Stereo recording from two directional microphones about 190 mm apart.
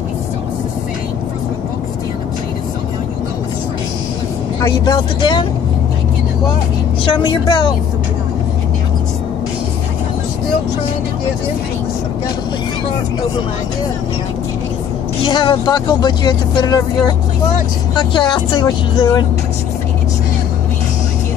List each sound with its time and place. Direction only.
4.8 s speech: 25° left (ahead or behind)
7.1 s speech: 25° left (ahead or behind)
15.2 s speech: 25° left (ahead or behind)